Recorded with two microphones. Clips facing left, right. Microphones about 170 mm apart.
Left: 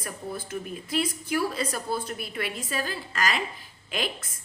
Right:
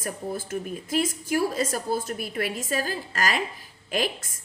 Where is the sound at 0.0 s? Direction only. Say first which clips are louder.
Right 4 dB; 45° right (ahead or behind).